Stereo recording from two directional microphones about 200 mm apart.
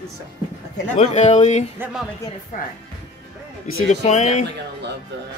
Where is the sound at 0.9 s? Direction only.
35° left (ahead or behind).